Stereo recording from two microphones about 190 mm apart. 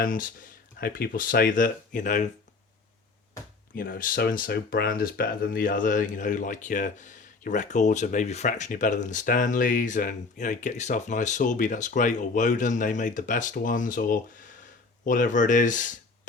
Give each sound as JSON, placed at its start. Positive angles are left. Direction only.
{"t": 0.0, "sound": "speech", "side_deg": 45}
{"t": 3.8, "sound": "speech", "side_deg": 50}